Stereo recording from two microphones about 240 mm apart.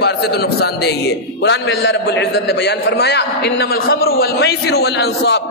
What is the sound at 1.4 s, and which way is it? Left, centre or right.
A man's voice, left.